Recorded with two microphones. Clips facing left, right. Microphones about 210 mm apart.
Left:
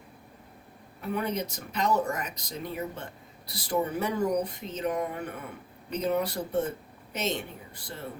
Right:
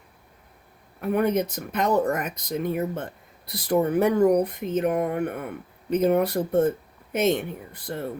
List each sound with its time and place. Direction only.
1.0 s speech: 55° right (ahead or behind)